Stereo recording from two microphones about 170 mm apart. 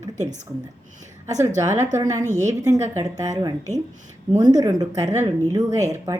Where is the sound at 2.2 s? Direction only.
45° right (ahead or behind).